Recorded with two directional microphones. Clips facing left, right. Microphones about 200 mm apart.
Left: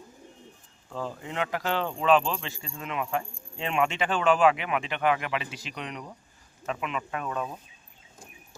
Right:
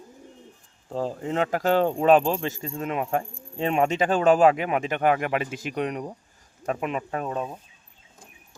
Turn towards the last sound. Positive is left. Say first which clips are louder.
# right 3 dB
turn(degrees=-25)  # may be behind; listen again after turning